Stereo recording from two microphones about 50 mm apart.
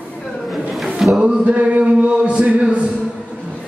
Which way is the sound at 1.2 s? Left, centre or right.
Right.